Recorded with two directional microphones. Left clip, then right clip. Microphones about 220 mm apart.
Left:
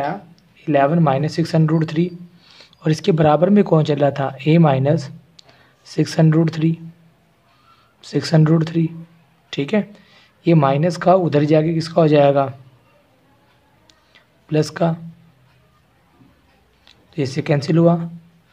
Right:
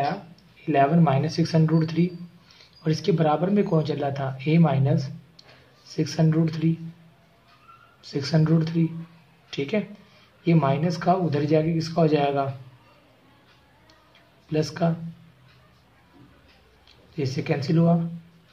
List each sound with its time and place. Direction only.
0.7 s a man's voice: 40° left (ahead or behind)
8.0 s a man's voice: 45° left (ahead or behind)
14.5 s a man's voice: 45° left (ahead or behind)
17.1 s a man's voice: 45° left (ahead or behind)